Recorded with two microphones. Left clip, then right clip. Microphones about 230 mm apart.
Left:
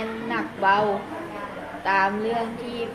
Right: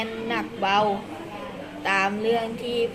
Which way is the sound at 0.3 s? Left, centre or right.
Right.